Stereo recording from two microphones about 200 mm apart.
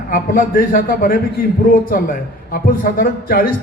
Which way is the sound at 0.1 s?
45° left (ahead or behind).